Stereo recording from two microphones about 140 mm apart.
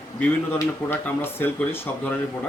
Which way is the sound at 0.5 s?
15° left (ahead or behind).